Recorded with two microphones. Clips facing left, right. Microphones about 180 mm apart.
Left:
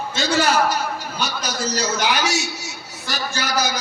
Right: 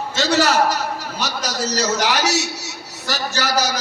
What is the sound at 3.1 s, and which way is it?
Speech, 80° right.